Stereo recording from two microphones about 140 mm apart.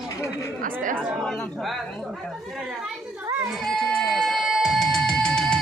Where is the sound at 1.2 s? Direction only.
5° left (ahead or behind).